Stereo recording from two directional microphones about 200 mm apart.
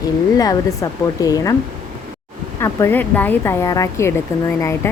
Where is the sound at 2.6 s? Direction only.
15° left (ahead or behind).